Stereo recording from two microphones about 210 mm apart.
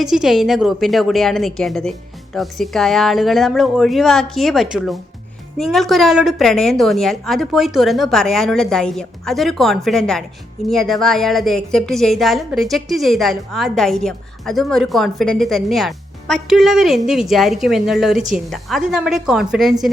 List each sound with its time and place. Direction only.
0.0 s a woman's voice: centre (ahead or behind)